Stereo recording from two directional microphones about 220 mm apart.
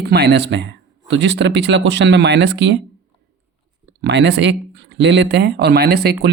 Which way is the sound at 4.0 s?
50° right (ahead or behind).